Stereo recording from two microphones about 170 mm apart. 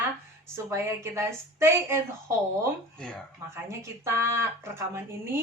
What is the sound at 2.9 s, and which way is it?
Speech, 5° left (ahead or behind).